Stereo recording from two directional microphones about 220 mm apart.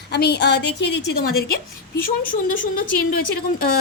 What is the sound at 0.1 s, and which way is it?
Speech, 50° left (ahead or behind).